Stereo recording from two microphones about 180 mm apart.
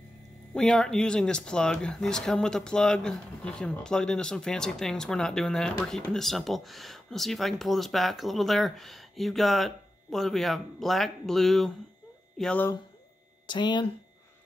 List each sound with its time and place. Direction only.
0.6 s speech: 5° left (ahead or behind)
13.5 s speech: 25° left (ahead or behind)